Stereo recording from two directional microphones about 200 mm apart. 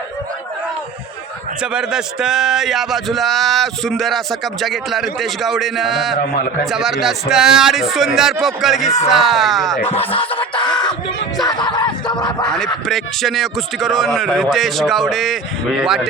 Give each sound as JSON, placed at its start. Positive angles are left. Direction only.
{"t": 1.6, "sound": "speech", "side_deg": -5}
{"t": 9.8, "sound": "a sound", "side_deg": 30}
{"t": 11.3, "sound": "music", "side_deg": 20}
{"t": 12.5, "sound": "speech", "side_deg": 0}